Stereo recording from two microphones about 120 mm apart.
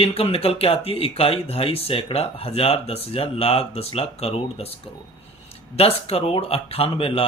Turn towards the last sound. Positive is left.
turn(degrees=50)  # may be behind; listen again after turning